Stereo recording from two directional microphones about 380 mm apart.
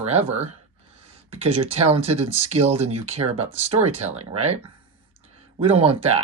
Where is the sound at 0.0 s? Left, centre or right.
Centre.